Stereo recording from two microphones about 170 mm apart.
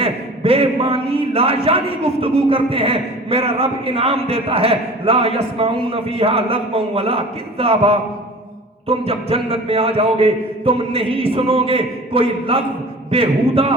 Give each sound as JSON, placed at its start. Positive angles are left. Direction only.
{"t": 0.0, "sound": "a man's voice", "side_deg": -35}